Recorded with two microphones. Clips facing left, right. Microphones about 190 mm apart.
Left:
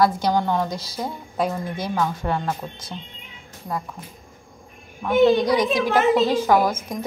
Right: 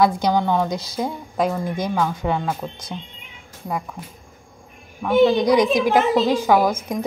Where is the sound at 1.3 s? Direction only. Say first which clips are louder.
Right 2 dB; 10° right (ahead or behind).